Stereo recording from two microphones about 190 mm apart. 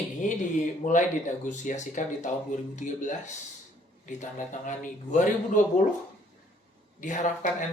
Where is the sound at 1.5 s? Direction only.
40° left (ahead or behind).